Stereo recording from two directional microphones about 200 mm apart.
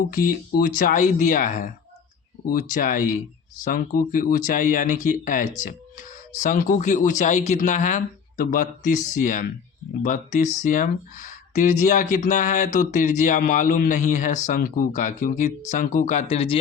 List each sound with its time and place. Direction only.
0.1 s speech: 45° left (ahead or behind); by 16.6 s 30° left (ahead or behind)